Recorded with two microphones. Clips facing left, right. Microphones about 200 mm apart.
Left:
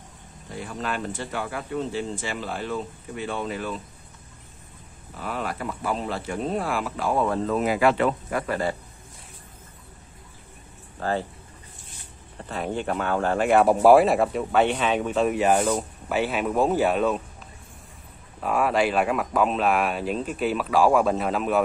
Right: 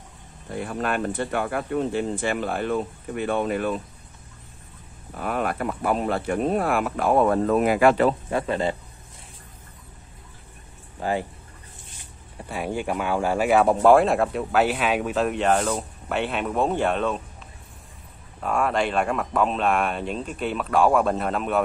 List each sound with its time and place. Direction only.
0.5 s speech: 55° right (ahead or behind)
5.1 s speech: 55° right (ahead or behind)
8.1 s speech: 25° right (ahead or behind)
11.0 s speech: 15° right (ahead or behind)
12.4 s speech: 10° right (ahead or behind); by 17.2 s 5° left (ahead or behind)
18.4 s speech: 5° left (ahead or behind)